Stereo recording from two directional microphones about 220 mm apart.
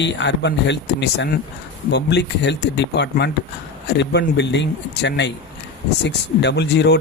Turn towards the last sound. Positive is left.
turn(degrees=50)  # may be behind; listen again after turning